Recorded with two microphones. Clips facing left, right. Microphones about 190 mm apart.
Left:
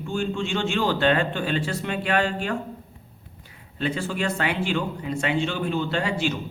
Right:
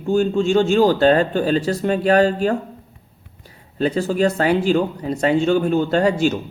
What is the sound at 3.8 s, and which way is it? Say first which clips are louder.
A man's voice: right 9 dB; 40° right (ahead or behind).